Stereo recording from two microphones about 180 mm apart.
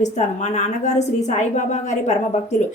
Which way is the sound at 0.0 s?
40° left (ahead or behind).